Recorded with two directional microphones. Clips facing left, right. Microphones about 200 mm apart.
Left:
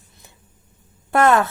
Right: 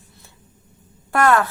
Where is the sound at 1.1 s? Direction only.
20° left (ahead or behind).